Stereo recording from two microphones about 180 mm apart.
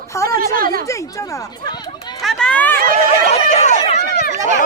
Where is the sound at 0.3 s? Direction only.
55° right (ahead or behind).